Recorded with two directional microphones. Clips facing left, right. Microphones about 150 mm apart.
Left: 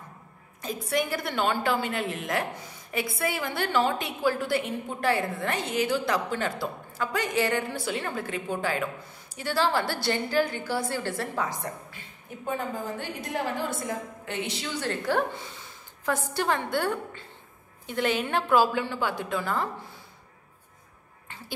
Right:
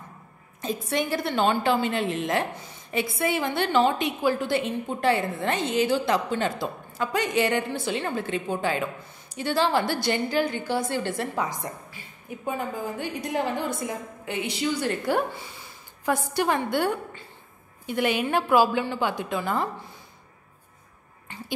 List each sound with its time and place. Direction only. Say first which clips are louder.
0.6 s a woman's voice: right 1 dB; 25° right (ahead or behind)